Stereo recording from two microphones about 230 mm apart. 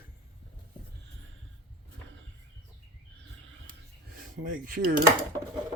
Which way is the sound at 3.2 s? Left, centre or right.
Right.